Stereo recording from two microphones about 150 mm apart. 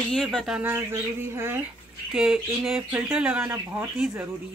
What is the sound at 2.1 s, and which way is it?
Speech, 5° right (ahead or behind).